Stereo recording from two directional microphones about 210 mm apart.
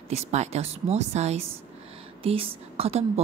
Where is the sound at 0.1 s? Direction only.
30° right (ahead or behind).